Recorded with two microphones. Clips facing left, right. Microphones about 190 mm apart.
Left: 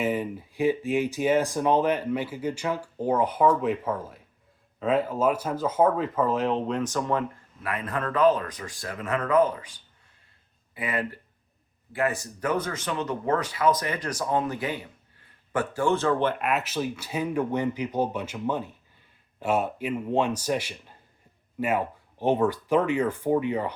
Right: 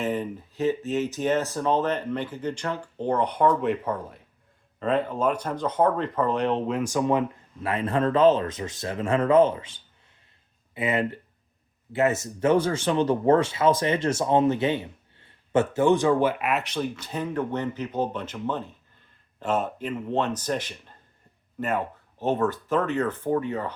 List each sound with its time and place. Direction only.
0.0 s speech: 10° left (ahead or behind); by 7.3 s 15° right (ahead or behind)
7.6 s speech: 30° right (ahead or behind); by 23.7 s 15° left (ahead or behind)